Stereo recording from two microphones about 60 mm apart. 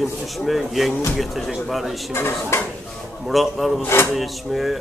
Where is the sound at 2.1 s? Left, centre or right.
Left.